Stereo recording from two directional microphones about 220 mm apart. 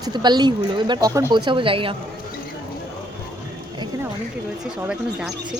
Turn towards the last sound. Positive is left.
turn(degrees=-5)  # may be behind; listen again after turning